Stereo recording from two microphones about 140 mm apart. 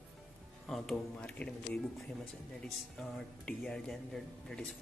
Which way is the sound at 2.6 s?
5° left (ahead or behind).